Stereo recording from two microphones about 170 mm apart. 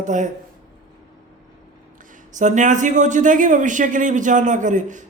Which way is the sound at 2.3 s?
45° right (ahead or behind).